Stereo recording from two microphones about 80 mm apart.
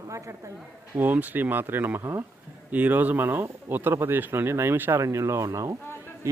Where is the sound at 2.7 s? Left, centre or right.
Right.